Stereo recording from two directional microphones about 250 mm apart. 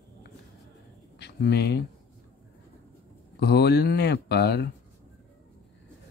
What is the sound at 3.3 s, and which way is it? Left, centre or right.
Speech, left.